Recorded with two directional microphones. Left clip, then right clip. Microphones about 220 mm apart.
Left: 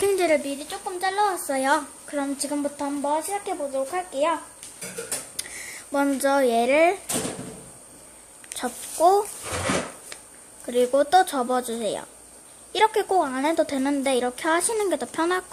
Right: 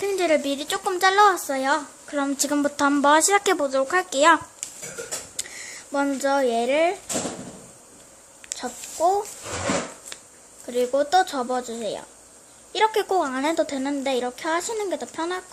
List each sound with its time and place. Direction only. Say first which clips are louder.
0.0 s a sound: left 2 dB; 5° left (ahead or behind)
0.4 s speech: right 6 dB; 25° right (ahead or behind)
1.5 s a woman's voice: left 1 dB; centre (ahead or behind); by 4.4 s 20° right (ahead or behind)
5.4 s speech: right 1 dB; centre (ahead or behind)
8.4 s speech: left 1 dB; 5° left (ahead or behind)
10.7 s a woman's voice: left 2 dB; 5° left (ahead or behind)